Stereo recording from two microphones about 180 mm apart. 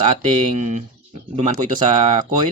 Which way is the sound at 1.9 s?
25° right (ahead or behind).